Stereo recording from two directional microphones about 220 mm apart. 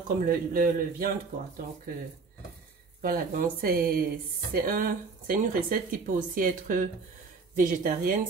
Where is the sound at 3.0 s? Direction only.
40° right (ahead or behind).